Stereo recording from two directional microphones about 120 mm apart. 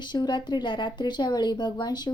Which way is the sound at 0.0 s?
40° left (ahead or behind).